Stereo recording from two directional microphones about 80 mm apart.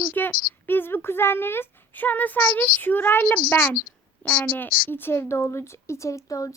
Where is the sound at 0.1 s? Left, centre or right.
Left.